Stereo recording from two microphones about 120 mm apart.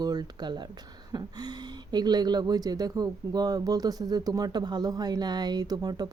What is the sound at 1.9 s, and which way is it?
Speech, 35° right (ahead or behind).